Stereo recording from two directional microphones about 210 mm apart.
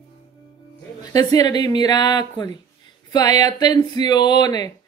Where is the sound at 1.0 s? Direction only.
20° left (ahead or behind).